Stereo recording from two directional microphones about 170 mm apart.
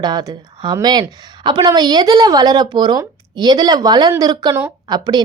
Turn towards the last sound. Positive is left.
turn(degrees=-25)  # may be behind; listen again after turning